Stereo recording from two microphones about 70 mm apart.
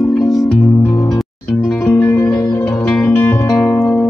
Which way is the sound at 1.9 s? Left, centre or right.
Left.